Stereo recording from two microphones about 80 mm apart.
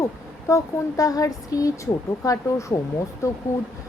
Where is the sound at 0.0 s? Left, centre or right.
Left.